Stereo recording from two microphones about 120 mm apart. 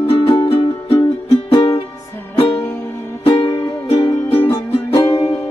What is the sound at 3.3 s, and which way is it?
Music, 45° left (ahead or behind).